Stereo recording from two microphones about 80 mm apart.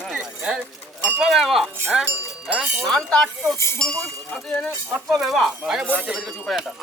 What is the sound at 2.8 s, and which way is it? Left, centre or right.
Speech, centre.